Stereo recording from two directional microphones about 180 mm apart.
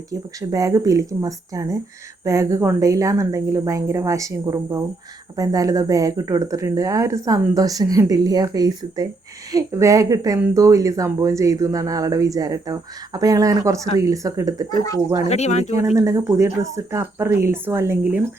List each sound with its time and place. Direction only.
0.1 s a woman's voice: 20° right (ahead or behind)
14.8 s speech: 20° left (ahead or behind)
15.3 s speech: 40° left (ahead or behind)
16.0 s a woman's voice: 15° right (ahead or behind)